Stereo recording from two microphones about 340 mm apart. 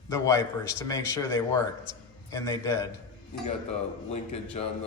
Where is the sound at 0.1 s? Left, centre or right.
Centre.